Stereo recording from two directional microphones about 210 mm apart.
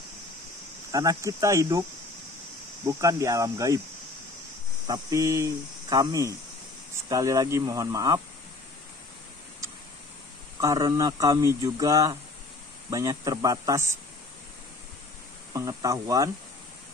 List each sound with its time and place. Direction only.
0.9 s speech: 15° right (ahead or behind)
2.9 s speech: 15° right (ahead or behind)
4.8 s speech: 15° right (ahead or behind)
10.6 s speech: 15° right (ahead or behind)
15.5 s speech: 15° right (ahead or behind)